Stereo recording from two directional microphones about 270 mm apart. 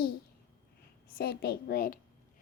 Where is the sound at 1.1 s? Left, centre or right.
Left.